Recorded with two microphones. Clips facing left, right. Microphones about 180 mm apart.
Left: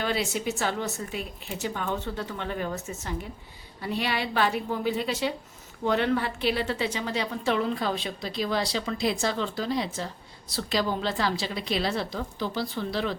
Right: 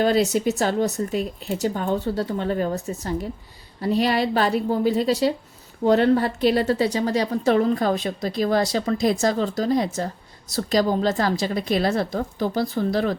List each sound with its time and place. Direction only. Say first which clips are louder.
0.0 s a woman's voice: right 9 dB; 40° right (ahead or behind)